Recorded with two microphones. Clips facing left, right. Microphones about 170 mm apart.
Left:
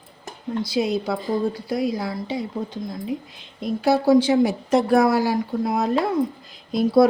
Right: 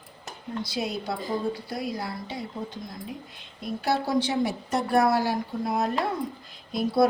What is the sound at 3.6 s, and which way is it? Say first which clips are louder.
Speech: left 8 dB; 90° left.